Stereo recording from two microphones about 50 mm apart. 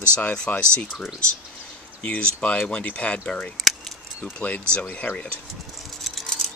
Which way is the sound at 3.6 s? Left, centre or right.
Centre.